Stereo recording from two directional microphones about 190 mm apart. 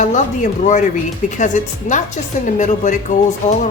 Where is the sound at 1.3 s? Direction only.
40° left (ahead or behind).